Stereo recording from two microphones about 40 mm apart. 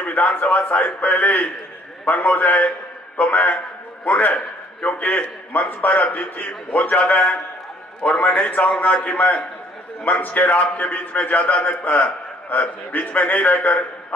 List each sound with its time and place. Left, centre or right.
0.0 s a man's voice: left
5.5 s a man's voice: left